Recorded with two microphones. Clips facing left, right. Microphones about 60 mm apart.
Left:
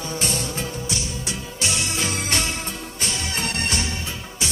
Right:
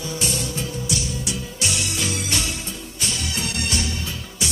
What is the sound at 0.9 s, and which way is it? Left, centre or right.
Music, left.